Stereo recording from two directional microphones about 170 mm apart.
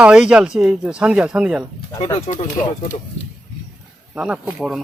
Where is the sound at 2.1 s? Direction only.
40° left (ahead or behind).